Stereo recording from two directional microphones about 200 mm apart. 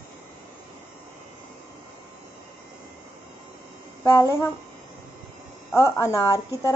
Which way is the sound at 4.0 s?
15° left (ahead or behind).